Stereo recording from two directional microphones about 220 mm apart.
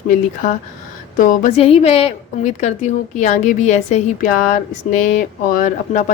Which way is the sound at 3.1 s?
35° left (ahead or behind).